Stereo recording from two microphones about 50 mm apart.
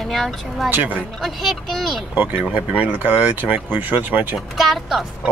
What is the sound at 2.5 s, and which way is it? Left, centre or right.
Speech, right.